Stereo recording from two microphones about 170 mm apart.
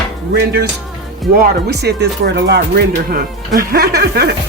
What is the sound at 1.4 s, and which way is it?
Speech, 75° right (ahead or behind).